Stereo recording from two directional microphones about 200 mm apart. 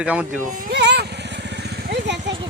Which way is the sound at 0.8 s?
55° right (ahead or behind).